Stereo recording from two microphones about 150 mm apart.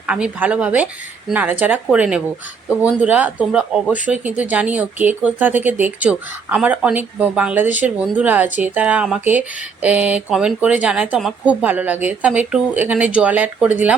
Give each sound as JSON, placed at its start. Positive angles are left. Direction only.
{"t": 0.1, "sound": "speech", "side_deg": -10}